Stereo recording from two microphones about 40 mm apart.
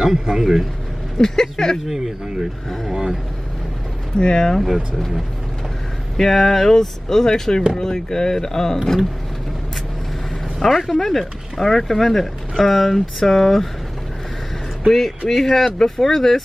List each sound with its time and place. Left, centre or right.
0.0 s a man's voice: centre
1.2 s speech: centre
1.9 s a man's voice: centre
4.2 s speech: centre
4.6 s speech: centre
6.1 s speech: centre
10.7 s speech: centre
14.9 s speech: centre